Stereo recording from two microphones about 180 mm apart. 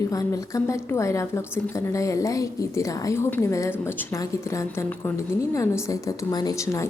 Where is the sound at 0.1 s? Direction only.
20° left (ahead or behind).